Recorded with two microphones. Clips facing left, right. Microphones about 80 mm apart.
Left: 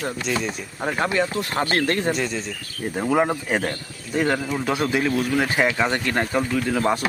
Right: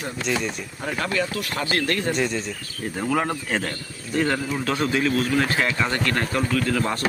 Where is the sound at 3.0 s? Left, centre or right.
Centre.